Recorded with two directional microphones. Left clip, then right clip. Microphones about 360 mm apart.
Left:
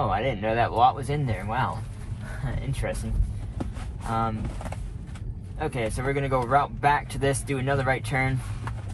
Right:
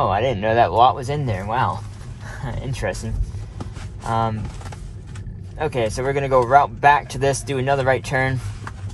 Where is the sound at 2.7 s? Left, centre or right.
Right.